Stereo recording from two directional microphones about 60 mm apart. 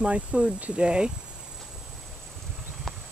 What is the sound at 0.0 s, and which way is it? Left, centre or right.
Speech, centre.